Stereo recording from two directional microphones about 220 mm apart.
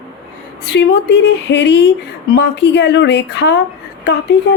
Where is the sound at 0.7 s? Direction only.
50° left (ahead or behind).